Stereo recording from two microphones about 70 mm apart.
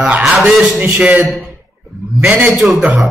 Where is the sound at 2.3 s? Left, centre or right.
Centre.